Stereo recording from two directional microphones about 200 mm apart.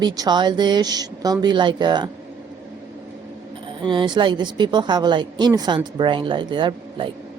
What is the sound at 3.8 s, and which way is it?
Speech, 25° right (ahead or behind).